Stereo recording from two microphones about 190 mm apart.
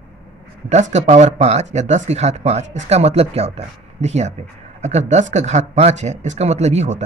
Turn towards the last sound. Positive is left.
turn(degrees=-35)  # may be behind; listen again after turning